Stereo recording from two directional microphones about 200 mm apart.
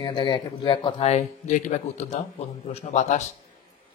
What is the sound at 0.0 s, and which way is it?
Speech, 25° left (ahead or behind).